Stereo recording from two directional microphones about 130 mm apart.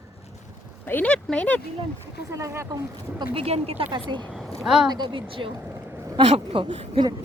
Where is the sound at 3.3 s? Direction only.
50° right (ahead or behind).